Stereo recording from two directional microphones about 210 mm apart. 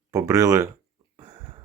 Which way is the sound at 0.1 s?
15° right (ahead or behind).